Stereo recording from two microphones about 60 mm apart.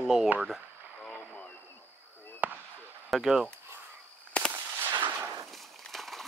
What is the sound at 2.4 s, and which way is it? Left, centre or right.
Fireworks, right.